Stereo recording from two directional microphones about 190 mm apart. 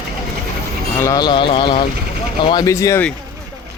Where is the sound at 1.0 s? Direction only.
20° left (ahead or behind).